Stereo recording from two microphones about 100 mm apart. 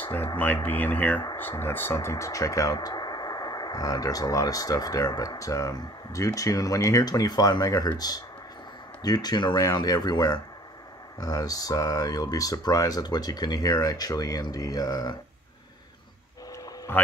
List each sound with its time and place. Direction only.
0.0 s a sound: 20° left (ahead or behind)
0.4 s speech: 15° left (ahead or behind); by 15.1 s 40° left (ahead or behind)
17.0 s speech: 15° left (ahead or behind)